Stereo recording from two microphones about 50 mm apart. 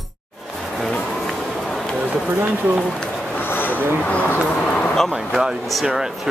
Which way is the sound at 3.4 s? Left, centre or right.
Left.